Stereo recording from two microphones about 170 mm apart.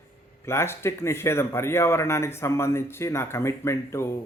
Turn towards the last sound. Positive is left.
turn(degrees=15)  # may be behind; listen again after turning